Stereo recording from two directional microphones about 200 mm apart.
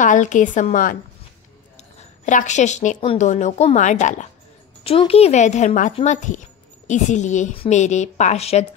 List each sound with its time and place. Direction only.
0.0 s a woman's voice: 40° left (ahead or behind)
2.0 s a woman's voice: 35° left (ahead or behind)